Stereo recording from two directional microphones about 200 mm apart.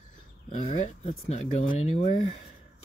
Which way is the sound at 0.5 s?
40° left (ahead or behind).